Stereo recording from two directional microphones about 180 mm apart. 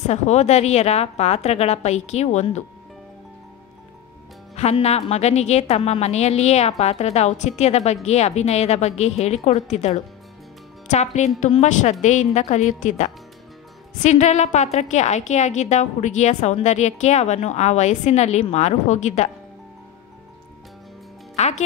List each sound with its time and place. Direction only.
0.0 s a woman's voice: 40° left (ahead or behind)
4.6 s a woman's voice: 35° left (ahead or behind)
21.4 s a woman's voice: 40° left (ahead or behind)